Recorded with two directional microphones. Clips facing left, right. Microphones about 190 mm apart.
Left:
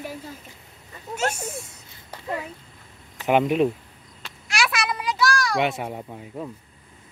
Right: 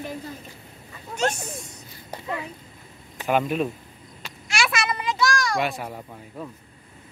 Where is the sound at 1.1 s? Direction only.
5° left (ahead or behind).